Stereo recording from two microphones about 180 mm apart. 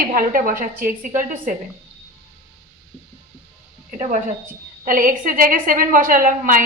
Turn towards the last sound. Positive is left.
turn(degrees=-50)  # may be behind; listen again after turning